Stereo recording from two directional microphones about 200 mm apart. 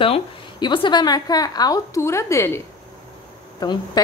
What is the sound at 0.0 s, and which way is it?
Speech, 25° left (ahead or behind).